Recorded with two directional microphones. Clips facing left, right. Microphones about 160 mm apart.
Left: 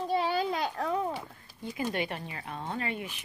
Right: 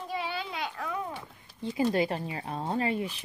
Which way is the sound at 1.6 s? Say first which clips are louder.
Right 6 dB; 30° right (ahead or behind).